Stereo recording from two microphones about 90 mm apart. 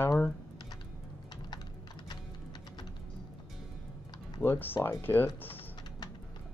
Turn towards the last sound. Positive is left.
turn(degrees=25)  # may be behind; listen again after turning